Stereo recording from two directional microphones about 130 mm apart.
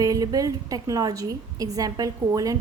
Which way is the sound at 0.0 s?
30° right (ahead or behind).